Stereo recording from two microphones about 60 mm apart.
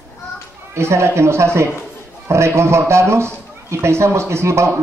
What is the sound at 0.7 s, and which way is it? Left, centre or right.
Speech, right.